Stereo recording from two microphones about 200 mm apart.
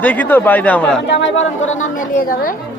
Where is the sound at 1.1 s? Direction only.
65° left (ahead or behind).